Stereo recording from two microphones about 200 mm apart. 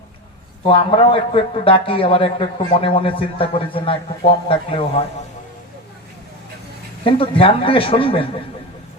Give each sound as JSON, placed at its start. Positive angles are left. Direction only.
{"t": 0.7, "sound": "a man's voice", "side_deg": 25}
{"t": 7.0, "sound": "a man's voice", "side_deg": 25}